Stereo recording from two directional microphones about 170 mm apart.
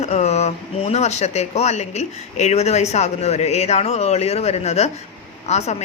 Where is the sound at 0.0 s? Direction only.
40° left (ahead or behind).